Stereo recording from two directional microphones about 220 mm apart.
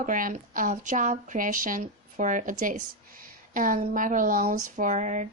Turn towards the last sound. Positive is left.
turn(degrees=-35)  # may be behind; listen again after turning